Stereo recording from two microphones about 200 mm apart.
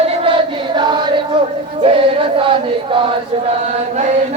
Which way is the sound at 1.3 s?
25° right (ahead or behind).